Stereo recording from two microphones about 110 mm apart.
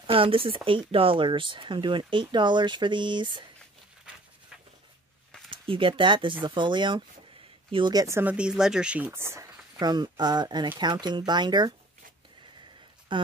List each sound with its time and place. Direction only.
0.0 s speech: 55° right (ahead or behind)
5.5 s speech: 50° right (ahead or behind)
8.1 s speech: 15° right (ahead or behind)
9.8 s speech: 40° right (ahead or behind)
13.1 s speech: 45° right (ahead or behind)